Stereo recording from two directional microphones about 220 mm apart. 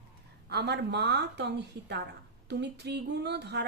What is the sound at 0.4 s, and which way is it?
A woman's voice, 50° right (ahead or behind).